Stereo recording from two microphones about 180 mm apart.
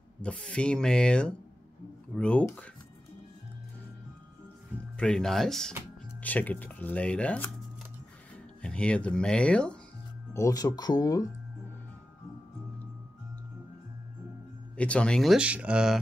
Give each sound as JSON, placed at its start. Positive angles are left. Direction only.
{"t": 0.2, "sound": "speech", "side_deg": 5}
{"t": 4.9, "sound": "speech", "side_deg": 5}
{"t": 8.6, "sound": "speech", "side_deg": 5}
{"t": 10.3, "sound": "speech", "side_deg": 20}
{"t": 14.8, "sound": "speech", "side_deg": 5}